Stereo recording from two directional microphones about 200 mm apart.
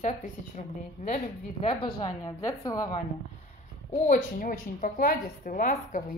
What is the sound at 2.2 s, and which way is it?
Speech, 20° left (ahead or behind).